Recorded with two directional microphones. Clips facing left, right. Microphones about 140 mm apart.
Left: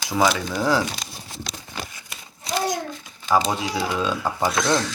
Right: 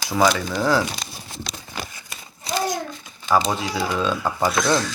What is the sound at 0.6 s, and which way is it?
Speech, 15° left (ahead or behind).